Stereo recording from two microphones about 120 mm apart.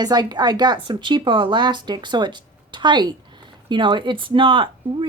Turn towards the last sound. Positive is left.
turn(degrees=-45)  # may be behind; listen again after turning